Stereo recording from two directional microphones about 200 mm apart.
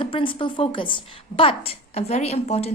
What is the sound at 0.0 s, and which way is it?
A woman's voice, 25° left (ahead or behind).